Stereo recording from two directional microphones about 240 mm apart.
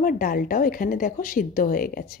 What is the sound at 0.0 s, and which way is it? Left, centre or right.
A woman's voice, left.